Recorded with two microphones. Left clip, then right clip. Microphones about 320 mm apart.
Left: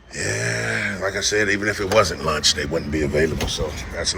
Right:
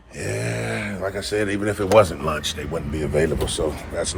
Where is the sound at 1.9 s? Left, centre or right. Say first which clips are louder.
Right 3 dB; centre.